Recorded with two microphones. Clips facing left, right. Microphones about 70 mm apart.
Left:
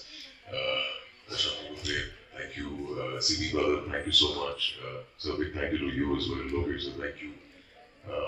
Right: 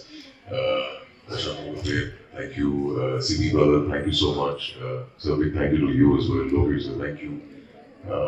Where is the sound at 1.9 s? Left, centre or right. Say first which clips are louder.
Right 8 dB; right.